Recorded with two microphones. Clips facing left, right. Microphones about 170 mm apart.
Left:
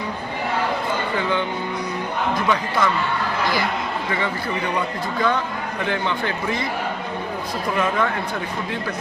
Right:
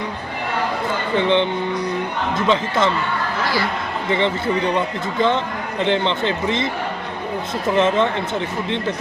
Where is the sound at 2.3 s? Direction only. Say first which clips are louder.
Right 4 dB; 25° right (ahead or behind).